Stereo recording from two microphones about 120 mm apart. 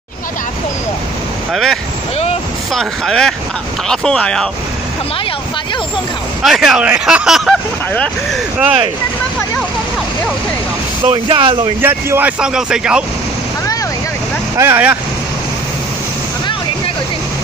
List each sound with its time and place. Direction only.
1.5 s speech: 5° left (ahead or behind)
6.4 s speech: centre (ahead or behind)
7.9 s speech: 10° left (ahead or behind)
11.1 s speech: 45° right (ahead or behind)
11.8 s speech: 15° right (ahead or behind)
14.6 s speech: 15° right (ahead or behind)